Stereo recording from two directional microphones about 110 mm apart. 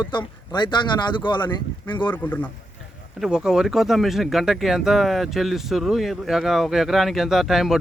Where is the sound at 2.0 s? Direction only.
15° left (ahead or behind).